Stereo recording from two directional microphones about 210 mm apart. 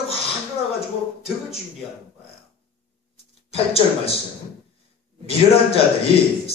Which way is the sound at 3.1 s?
30° left (ahead or behind).